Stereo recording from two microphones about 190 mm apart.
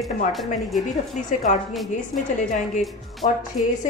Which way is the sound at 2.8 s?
Centre (ahead or behind).